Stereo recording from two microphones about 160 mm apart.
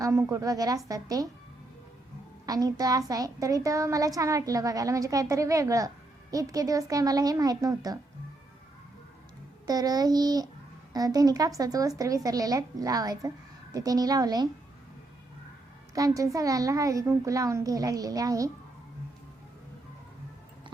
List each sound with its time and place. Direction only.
0.0 s a woman's voice: 20° right (ahead or behind)
2.5 s a woman's voice: 25° right (ahead or behind)
9.6 s a woman's voice: 25° right (ahead or behind)
16.0 s a woman's voice: 20° right (ahead or behind)